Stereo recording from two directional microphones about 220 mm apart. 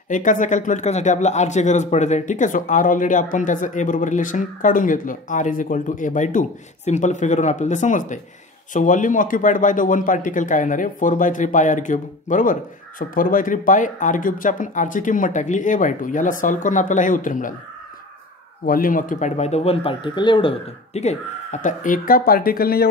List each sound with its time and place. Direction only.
0.1 s speech: 35° left (ahead or behind)
18.7 s speech: 40° left (ahead or behind)